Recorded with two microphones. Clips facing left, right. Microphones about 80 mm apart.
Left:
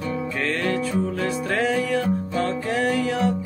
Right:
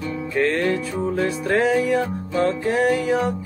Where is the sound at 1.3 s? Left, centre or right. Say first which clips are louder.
Right 4 dB; centre.